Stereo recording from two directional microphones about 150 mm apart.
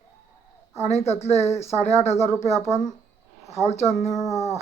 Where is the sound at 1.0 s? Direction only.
45° left (ahead or behind).